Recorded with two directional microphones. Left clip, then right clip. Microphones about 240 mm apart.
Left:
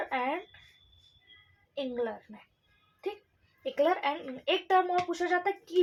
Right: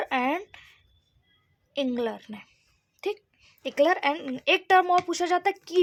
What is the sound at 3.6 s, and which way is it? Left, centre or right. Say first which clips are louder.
Speech: right 5 dB; right.